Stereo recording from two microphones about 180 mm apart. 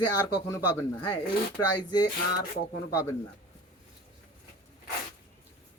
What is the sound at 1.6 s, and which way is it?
Speech, 15° left (ahead or behind).